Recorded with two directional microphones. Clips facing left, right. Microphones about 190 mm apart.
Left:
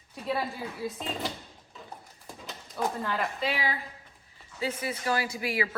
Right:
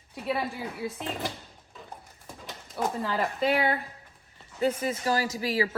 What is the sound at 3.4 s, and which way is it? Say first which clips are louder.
A woman's voice: right 6 dB; 55° right (ahead or behind).